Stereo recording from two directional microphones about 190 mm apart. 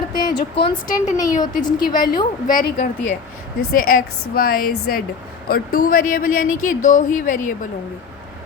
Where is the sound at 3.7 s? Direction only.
45° left (ahead or behind).